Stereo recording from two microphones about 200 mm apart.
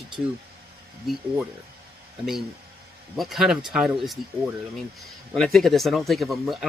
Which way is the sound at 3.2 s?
Centre (ahead or behind).